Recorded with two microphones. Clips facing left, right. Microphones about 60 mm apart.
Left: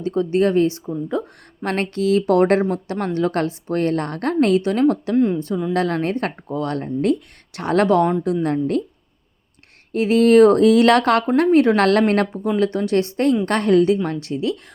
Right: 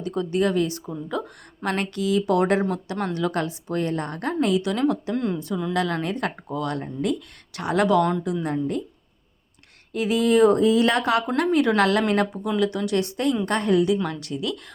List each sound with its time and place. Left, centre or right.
0.0 s speech: left
1.6 s speech: left
4.6 s speech: left
9.9 s speech: left
11.3 s speech: left
11.8 s speech: left
12.3 s speech: left
13.4 s speech: left
14.0 s speech: left